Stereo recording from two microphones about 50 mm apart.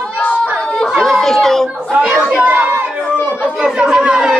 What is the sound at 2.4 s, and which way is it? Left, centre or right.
Chatter, right.